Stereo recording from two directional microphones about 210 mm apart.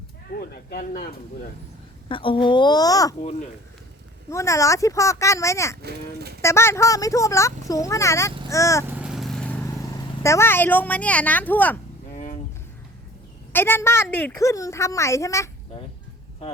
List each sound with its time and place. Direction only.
0.3 s speech: 45° left (ahead or behind)
2.0 s a child's voice: 25° left (ahead or behind)
4.3 s a child's voice: 15° left (ahead or behind)
5.8 s speech: 50° right (ahead or behind)
6.4 s a child's voice: 10° left (ahead or behind)
9.0 s vehicle: centre (ahead or behind)
9.9 s a child's voice: 15° left (ahead or behind)
12.1 s a sound: 35° left (ahead or behind)
13.5 s a child's voice: 10° left (ahead or behind)